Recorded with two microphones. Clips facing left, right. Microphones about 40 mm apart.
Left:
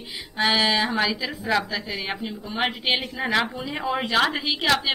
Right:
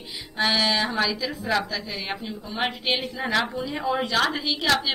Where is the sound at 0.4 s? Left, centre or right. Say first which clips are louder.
Left 2 dB; centre.